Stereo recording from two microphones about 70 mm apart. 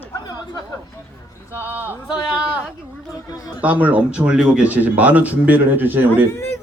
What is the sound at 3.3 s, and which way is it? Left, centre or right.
Speech, left.